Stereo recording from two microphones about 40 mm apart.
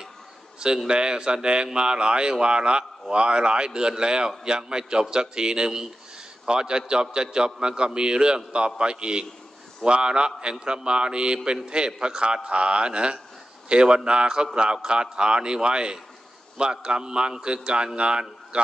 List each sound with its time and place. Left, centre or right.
0.8 s a man's voice: right